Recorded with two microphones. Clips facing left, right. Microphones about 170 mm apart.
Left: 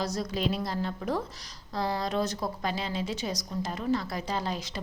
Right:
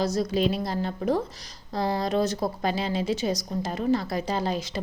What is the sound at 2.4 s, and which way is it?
A woman's voice, 35° right (ahead or behind).